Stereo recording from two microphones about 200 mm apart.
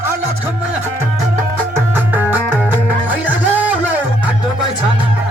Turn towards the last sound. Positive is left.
turn(degrees=-10)  # may be behind; listen again after turning